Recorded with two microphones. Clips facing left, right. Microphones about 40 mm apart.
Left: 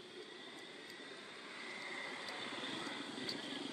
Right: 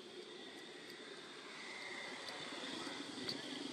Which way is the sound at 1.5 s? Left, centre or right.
Centre.